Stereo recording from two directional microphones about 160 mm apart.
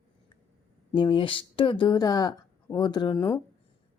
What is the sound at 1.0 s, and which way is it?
A woman's voice, 30° left (ahead or behind).